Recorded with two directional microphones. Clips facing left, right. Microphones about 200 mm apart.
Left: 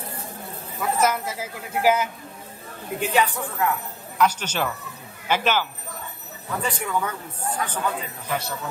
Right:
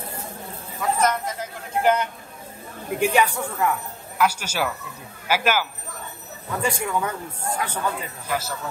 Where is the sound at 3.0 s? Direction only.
10° right (ahead or behind).